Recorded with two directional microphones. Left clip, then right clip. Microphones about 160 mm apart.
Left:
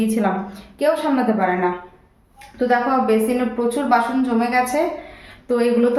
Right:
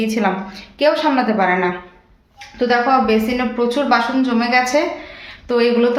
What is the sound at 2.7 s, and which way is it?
A woman's voice, 15° right (ahead or behind).